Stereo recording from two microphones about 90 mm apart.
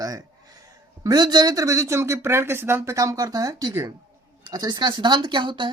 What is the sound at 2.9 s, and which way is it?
Speech, 40° right (ahead or behind).